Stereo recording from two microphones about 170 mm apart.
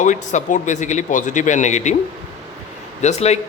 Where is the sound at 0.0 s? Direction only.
45° left (ahead or behind).